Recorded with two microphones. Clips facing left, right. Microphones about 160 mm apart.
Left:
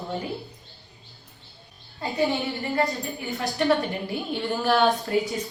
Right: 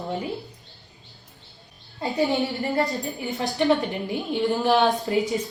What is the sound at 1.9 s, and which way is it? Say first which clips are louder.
A woman's voice: right 2 dB; 20° right (ahead or behind).